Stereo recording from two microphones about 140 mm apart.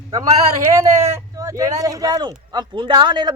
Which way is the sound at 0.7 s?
20° right (ahead or behind).